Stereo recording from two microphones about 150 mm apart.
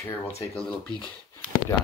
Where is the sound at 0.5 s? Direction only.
35° left (ahead or behind).